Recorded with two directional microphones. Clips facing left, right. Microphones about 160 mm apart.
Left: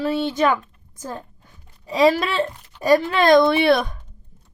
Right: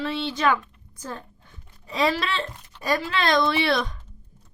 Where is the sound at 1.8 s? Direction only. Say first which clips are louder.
Left 7 dB; 35° left (ahead or behind); by 4.0 s 50° left (ahead or behind).